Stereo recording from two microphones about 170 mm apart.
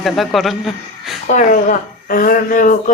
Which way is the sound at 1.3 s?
50° left (ahead or behind).